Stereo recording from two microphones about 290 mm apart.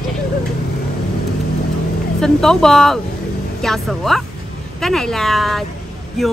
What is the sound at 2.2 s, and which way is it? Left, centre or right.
Speech, centre.